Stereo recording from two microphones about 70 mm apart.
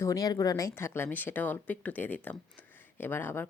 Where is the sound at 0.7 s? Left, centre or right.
Left.